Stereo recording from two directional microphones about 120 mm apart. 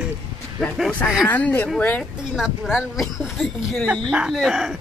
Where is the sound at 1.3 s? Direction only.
15° left (ahead or behind).